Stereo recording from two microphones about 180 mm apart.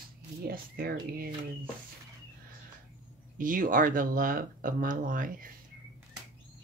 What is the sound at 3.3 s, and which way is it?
Speech, 50° right (ahead or behind).